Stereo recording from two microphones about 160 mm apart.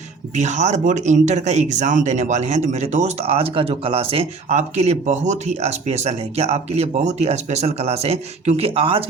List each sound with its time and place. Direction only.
0.3 s speech: 45° right (ahead or behind)